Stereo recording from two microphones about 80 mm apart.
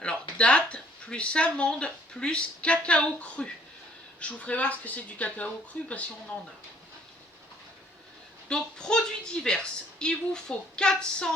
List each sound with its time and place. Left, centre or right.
0.0 s speech: centre
8.4 s speech: centre